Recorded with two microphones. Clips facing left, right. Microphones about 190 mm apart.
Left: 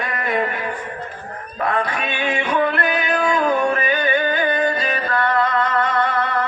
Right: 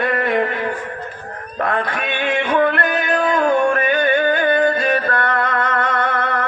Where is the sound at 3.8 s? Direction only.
60° right (ahead or behind).